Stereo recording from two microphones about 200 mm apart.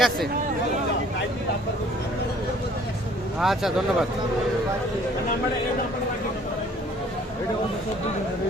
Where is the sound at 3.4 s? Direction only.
Centre (ahead or behind).